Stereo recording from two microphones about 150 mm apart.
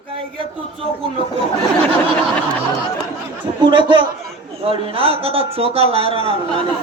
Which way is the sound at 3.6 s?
30° right (ahead or behind).